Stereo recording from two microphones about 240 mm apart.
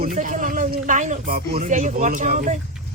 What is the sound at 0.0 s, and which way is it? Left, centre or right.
Speech, right.